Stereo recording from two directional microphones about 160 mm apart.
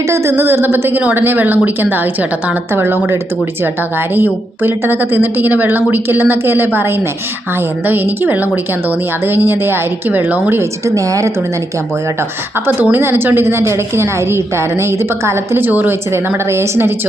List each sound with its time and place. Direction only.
0.1 s a woman's voice: 15° right (ahead or behind)
7.9 s a woman's voice: 10° right (ahead or behind)
12.6 s a woman's voice: 15° right (ahead or behind)